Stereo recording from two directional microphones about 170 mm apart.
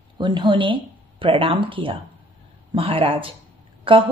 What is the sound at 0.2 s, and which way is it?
A woman's voice, 25° right (ahead or behind).